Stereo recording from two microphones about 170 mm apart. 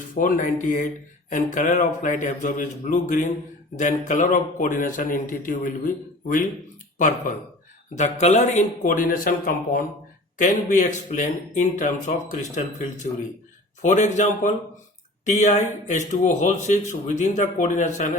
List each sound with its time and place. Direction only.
0.1 s speech: 50° left (ahead or behind)
7.9 s speech: 45° left (ahead or behind)
10.3 s speech: 45° left (ahead or behind)